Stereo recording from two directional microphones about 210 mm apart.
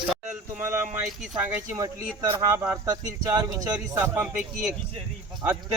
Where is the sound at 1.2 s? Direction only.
10° right (ahead or behind).